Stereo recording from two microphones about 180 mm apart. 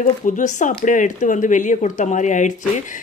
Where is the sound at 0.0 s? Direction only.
45° left (ahead or behind).